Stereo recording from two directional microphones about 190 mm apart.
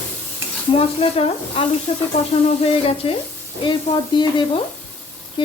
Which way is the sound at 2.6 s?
30° left (ahead or behind).